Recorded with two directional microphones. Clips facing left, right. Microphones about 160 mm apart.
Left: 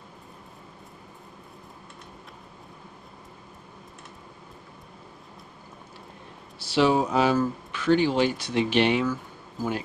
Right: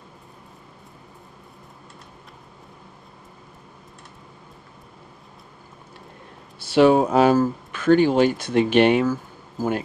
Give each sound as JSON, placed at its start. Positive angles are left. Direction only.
{"t": 6.6, "sound": "speech", "side_deg": -55}